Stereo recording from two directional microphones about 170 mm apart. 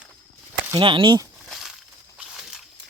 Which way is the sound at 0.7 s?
30° right (ahead or behind).